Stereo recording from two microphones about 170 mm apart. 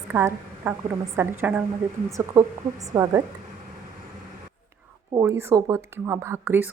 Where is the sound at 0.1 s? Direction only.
15° right (ahead or behind).